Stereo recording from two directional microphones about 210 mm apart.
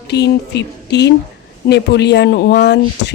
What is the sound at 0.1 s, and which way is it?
A woman's voice, 55° left (ahead or behind).